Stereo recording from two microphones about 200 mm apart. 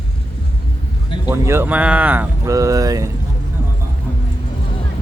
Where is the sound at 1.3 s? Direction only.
10° right (ahead or behind).